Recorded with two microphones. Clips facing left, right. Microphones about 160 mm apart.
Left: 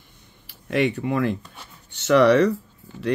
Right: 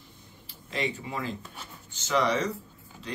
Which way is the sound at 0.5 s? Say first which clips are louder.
Left 10 dB; 65° left (ahead or behind).